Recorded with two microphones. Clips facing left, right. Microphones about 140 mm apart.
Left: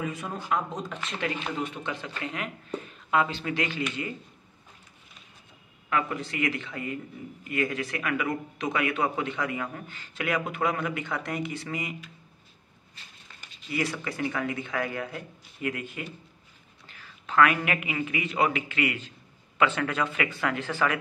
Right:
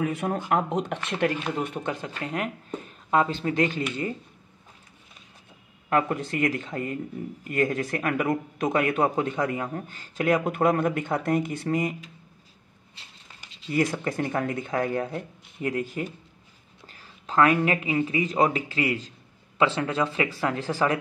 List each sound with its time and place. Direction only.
0.0 s speech: 65° right (ahead or behind)
1.2 s a man's voice: 50° right (ahead or behind)
5.9 s a man's voice: 45° right (ahead or behind)
13.7 s a man's voice: 45° right (ahead or behind)
16.8 s whispering: 40° right (ahead or behind)
17.5 s speech: 30° right (ahead or behind)